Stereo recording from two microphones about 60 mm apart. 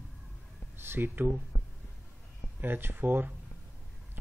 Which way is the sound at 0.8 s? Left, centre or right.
Right.